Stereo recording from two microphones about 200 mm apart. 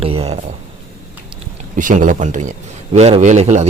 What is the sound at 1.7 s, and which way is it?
Speech, 40° right (ahead or behind).